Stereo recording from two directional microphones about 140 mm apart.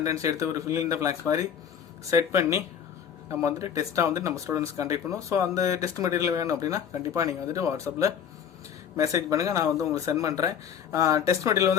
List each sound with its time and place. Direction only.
0.0 s speech: 25° right (ahead or behind)